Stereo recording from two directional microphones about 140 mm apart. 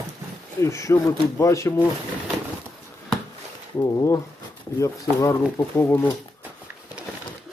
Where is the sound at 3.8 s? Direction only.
25° left (ahead or behind).